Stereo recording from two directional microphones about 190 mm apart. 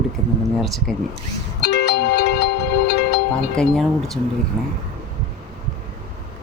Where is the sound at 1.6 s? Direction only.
65° left (ahead or behind).